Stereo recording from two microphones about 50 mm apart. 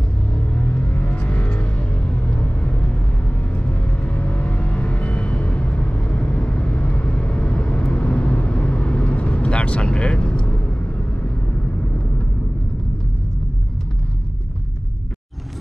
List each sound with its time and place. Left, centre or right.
0.3 s music: left